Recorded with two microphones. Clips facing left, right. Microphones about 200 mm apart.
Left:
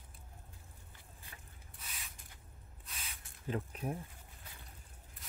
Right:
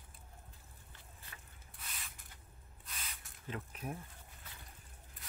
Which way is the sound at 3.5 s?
35° left (ahead or behind).